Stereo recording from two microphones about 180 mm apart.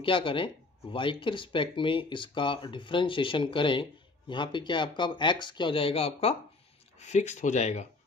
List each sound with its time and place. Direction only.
0.0 s speech: 30° left (ahead or behind)